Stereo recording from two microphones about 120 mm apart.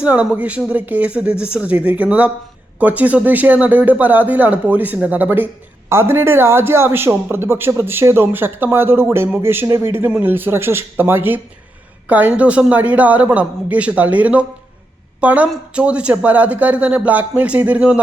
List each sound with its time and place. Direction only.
0.0 s a woman's voice: 10° right (ahead or behind)